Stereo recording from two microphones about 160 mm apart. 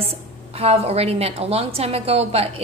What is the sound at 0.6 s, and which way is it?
A woman's voice, 40° right (ahead or behind).